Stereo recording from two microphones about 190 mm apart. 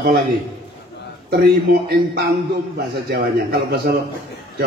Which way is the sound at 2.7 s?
55° right (ahead or behind).